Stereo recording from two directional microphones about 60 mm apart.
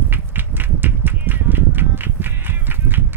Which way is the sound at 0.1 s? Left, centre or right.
Right.